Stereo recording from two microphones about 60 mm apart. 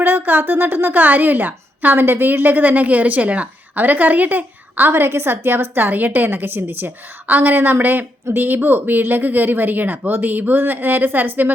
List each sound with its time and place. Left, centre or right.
0.0 s a woman's voice: right
4.9 s a woman's voice: right